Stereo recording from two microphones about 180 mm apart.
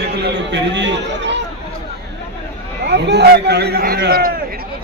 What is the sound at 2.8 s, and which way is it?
A man's voice, 70° right (ahead or behind).